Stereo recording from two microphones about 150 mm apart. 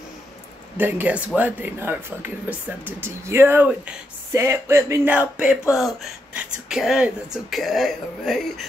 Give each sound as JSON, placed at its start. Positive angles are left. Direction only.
{"t": 0.7, "sound": "speech", "side_deg": -15}
{"t": 4.3, "sound": "music", "side_deg": -20}
{"t": 5.1, "sound": "speech", "side_deg": -10}